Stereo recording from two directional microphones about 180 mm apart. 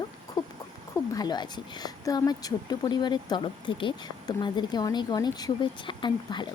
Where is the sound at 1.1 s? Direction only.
20° left (ahead or behind).